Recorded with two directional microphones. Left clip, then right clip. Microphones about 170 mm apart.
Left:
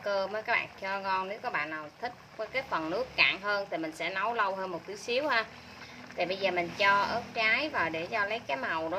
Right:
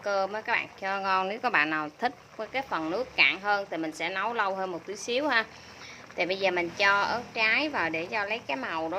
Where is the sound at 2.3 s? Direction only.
25° right (ahead or behind).